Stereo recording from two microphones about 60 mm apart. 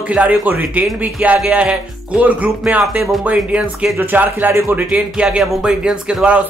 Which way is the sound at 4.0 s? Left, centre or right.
Right.